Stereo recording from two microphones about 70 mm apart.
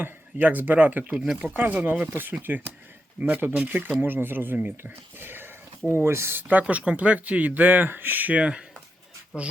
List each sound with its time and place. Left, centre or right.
0.0 s speech: right
1.1 s speech: centre
1.7 s speech: right
6.5 s speech: right